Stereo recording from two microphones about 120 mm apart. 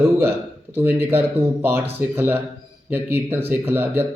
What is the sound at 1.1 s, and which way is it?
Speech, 15° right (ahead or behind).